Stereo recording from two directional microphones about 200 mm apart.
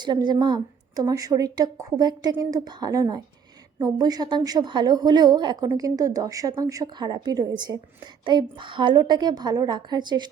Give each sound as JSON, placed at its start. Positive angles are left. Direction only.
{"t": 0.0, "sound": "a woman's voice", "side_deg": -20}